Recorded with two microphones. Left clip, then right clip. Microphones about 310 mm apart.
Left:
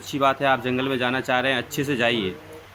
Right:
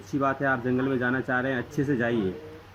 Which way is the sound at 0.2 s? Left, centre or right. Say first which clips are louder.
Left 6 dB; centre.